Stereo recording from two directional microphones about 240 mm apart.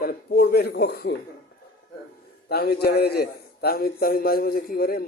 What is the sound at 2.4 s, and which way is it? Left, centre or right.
A man's voice, left.